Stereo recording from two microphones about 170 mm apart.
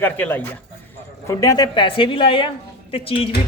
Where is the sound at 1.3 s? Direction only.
20° left (ahead or behind).